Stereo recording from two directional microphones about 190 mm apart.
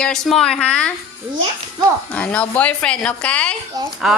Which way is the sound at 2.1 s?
10° left (ahead or behind).